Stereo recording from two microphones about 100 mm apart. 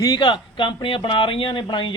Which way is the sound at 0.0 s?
45° left (ahead or behind).